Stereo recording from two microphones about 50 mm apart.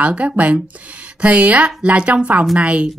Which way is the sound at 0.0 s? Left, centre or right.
Right.